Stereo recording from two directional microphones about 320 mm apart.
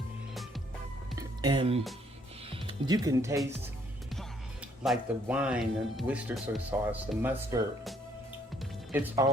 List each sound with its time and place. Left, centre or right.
1.4 s speech: centre
4.8 s speech: centre